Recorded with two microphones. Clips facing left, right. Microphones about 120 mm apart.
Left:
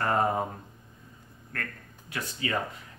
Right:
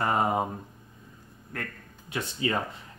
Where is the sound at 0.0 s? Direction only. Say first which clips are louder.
Right 1 dB; 15° right (ahead or behind).